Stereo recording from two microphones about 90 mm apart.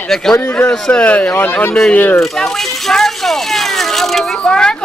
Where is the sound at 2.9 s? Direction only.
5° left (ahead or behind).